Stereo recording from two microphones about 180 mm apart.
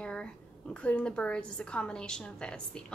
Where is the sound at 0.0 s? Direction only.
5° left (ahead or behind).